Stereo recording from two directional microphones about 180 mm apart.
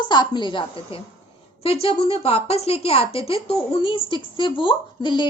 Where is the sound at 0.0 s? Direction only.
25° left (ahead or behind).